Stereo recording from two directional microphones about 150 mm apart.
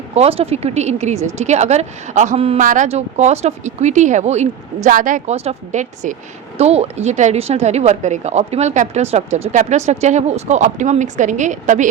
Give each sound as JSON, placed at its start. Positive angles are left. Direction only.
{"t": 0.1, "sound": "a woman's voice", "side_deg": -40}
{"t": 2.6, "sound": "a woman's voice", "side_deg": -55}